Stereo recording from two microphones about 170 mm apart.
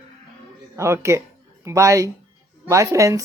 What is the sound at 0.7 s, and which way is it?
A woman's voice, 15° right (ahead or behind).